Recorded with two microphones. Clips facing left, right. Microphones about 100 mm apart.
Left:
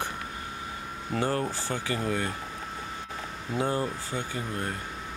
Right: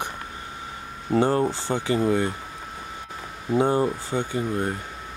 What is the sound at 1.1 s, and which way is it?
Speech, 25° right (ahead or behind).